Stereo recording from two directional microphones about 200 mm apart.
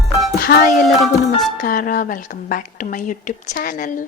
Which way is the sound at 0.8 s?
Centre (ahead or behind).